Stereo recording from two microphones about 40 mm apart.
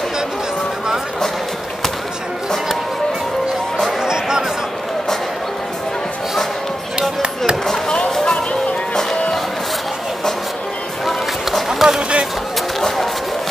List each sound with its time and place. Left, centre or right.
4.0 s music: centre
7.0 s chop: right
11.1 s run: centre
12.8 s music: centre